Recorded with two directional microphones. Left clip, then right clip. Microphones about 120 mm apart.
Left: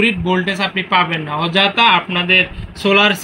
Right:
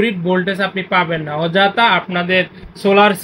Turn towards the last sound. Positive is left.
turn(degrees=-35)  # may be behind; listen again after turning